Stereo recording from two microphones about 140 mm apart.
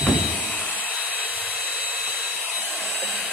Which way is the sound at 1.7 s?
10° right (ahead or behind).